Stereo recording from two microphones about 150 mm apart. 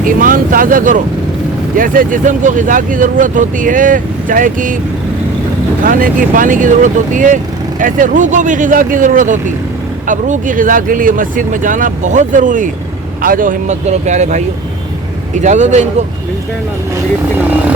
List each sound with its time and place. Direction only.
0.0 s speech: 65° right (ahead or behind)
5.8 s speech: 65° right (ahead or behind)